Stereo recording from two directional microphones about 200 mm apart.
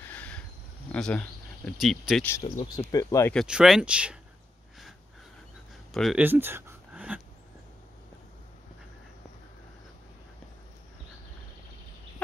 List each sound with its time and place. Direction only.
0.0 s a sound: 10° left (ahead or behind)
0.9 s speech: 5° left (ahead or behind)
2.5 s speech: 25° left (ahead or behind)
3.3 s speech: 5° right (ahead or behind)
5.9 s speech: 5° right (ahead or behind)